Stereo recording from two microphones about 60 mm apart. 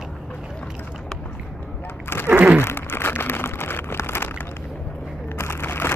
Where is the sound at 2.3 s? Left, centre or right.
Right.